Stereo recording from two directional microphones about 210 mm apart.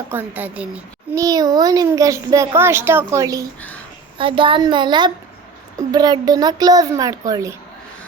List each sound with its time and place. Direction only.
0.1 s a child's voice: 10° right (ahead or behind)